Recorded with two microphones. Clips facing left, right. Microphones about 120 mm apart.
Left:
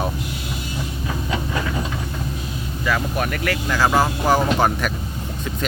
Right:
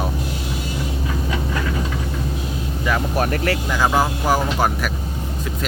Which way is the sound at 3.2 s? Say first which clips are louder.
Right 3 dB; 30° right (ahead or behind).